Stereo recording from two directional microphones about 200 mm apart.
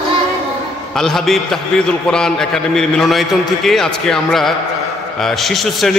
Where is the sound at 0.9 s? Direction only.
Centre (ahead or behind).